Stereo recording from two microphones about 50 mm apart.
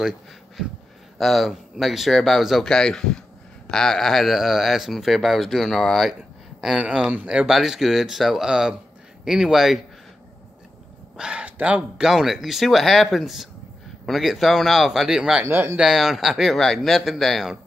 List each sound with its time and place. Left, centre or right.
1.1 s speech: centre
2.7 s speech: centre
6.6 s speech: centre
11.1 s a sound: centre
12.0 s speech: centre
14.9 s speech: centre
15.4 s speech: right
15.8 s speech: centre